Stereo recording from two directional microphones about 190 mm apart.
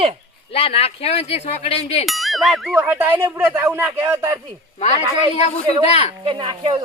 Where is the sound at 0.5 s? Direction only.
35° left (ahead or behind).